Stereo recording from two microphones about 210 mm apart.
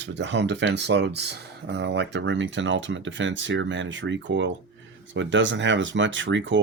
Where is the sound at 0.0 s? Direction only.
60° right (ahead or behind).